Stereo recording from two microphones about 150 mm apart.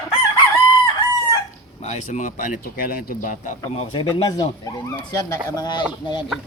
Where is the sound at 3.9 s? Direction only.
35° left (ahead or behind).